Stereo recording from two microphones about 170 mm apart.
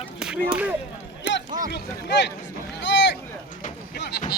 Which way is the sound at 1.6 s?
80° left.